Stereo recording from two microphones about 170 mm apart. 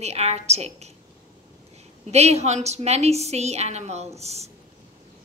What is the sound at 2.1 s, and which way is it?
A woman's voice, 40° right (ahead or behind).